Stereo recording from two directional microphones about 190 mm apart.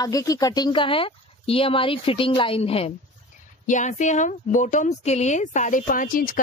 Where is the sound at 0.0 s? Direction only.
20° left (ahead or behind).